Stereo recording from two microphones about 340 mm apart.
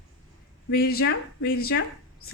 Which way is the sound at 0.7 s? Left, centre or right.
Left.